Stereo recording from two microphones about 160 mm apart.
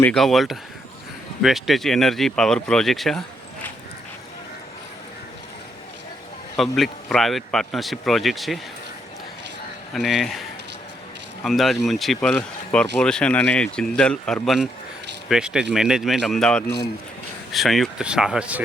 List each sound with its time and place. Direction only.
0.0 s speech: 5° left (ahead or behind)
6.6 s speech: centre (ahead or behind)
9.9 s speech: centre (ahead or behind)
11.4 s speech: centre (ahead or behind)